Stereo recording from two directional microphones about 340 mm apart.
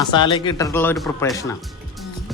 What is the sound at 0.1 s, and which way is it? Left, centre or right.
Speech, centre.